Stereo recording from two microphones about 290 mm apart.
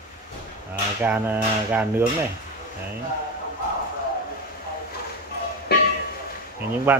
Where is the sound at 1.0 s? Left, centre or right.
Centre.